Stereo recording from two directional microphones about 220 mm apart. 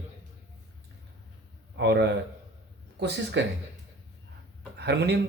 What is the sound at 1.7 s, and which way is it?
Speech, 50° right (ahead or behind).